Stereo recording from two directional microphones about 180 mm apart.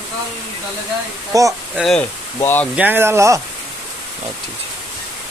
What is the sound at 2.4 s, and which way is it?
Speech, 10° left (ahead or behind).